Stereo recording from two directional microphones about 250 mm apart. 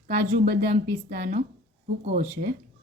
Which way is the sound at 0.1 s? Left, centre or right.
Right.